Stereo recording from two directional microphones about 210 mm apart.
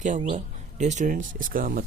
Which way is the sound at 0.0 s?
35° right (ahead or behind).